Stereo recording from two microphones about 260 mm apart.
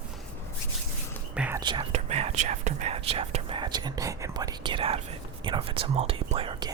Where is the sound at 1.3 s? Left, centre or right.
Centre.